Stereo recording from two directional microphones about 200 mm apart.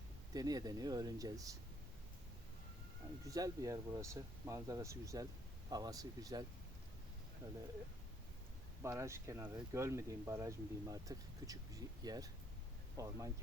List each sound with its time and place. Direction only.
0.3 s speech: 20° right (ahead or behind)
3.2 s speech: 15° right (ahead or behind)
7.4 s speech: 20° right (ahead or behind)
8.8 s speech: 15° right (ahead or behind)